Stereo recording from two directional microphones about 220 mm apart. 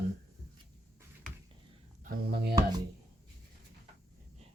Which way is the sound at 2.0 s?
40° right (ahead or behind).